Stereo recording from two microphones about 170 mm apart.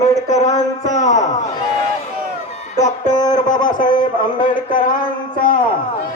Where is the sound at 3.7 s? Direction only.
50° left (ahead or behind).